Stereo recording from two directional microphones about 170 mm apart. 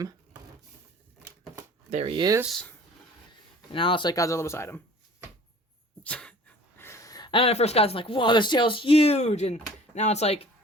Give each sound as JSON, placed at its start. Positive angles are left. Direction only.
{"t": 1.9, "sound": "speech", "side_deg": -35}
{"t": 2.4, "sound": "speech", "side_deg": 0}
{"t": 3.7, "sound": "speech", "side_deg": 30}
{"t": 6.0, "sound": "a sound", "side_deg": 5}
{"t": 6.7, "sound": "speech", "side_deg": 15}